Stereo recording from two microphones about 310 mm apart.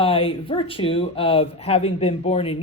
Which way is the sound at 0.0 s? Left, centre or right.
Centre.